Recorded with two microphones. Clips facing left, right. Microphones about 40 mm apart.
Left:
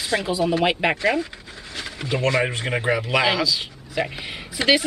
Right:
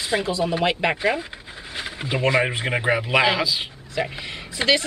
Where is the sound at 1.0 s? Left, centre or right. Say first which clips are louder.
Left 1 dB; centre.